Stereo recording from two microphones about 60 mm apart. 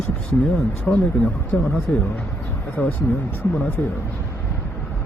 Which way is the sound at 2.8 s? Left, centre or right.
Left.